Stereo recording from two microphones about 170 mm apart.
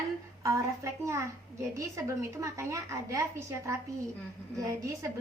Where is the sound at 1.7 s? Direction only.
20° right (ahead or behind).